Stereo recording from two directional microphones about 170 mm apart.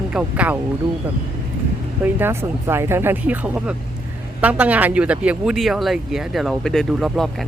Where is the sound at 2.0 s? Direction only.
10° right (ahead or behind).